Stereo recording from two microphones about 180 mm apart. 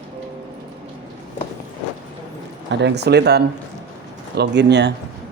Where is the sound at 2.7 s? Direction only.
70° right (ahead or behind).